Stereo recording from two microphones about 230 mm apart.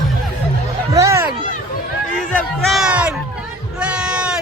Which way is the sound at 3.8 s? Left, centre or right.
Centre.